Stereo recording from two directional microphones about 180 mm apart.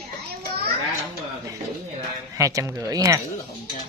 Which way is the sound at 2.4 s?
15° right (ahead or behind).